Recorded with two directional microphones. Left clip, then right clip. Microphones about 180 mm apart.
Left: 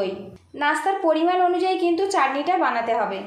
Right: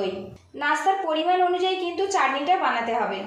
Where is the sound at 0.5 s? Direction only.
40° left (ahead or behind).